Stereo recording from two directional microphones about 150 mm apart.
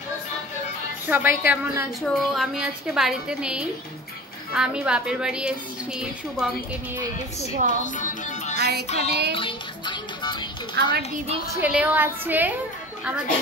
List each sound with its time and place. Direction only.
1.0 s a woman's voice: 10° right (ahead or behind)
7.5 s speech: 60° right (ahead or behind)
7.8 s music: 60° left (ahead or behind)
8.5 s music: 90° right
8.8 s music: 45° left (ahead or behind)
9.3 s music: 35° left (ahead or behind)
11.5 s a woman's voice: 10° right (ahead or behind)